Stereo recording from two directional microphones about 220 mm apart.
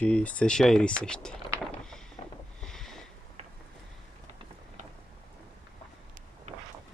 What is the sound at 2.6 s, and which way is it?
Sniff, centre (ahead or behind).